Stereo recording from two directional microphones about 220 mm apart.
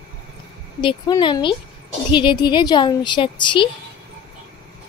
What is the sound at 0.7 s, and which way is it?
Speech, 20° left (ahead or behind).